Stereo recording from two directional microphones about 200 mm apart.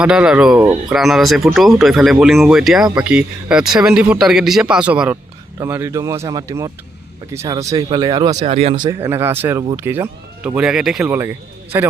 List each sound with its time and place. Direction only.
0.0 s speech: 5° right (ahead or behind)